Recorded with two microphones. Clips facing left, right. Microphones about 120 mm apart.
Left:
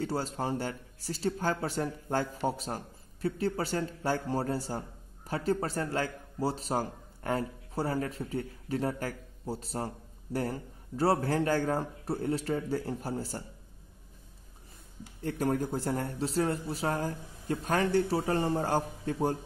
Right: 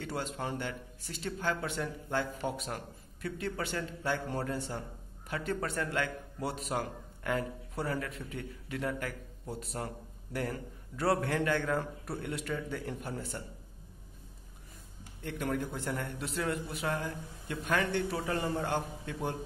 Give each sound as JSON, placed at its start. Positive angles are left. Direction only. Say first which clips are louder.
{"t": 0.0, "sound": "a man's voice", "louder": "left 4 dB", "side_deg": 35}
{"t": 15.2, "sound": "a man's voice", "louder": "left 5 dB", "side_deg": 35}